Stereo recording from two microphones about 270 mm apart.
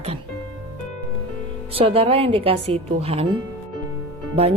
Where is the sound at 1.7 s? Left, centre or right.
Right.